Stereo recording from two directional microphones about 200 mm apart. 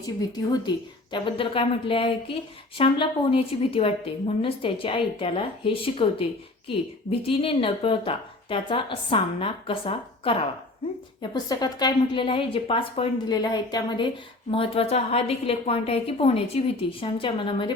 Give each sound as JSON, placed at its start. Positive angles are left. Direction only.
{"t": 0.0, "sound": "a woman's voice", "side_deg": 20}